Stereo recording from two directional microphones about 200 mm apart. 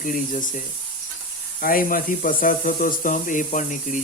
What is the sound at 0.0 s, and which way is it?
Speech, 40° left (ahead or behind).